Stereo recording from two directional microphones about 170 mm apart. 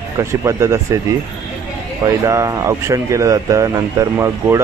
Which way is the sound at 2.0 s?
20° right (ahead or behind).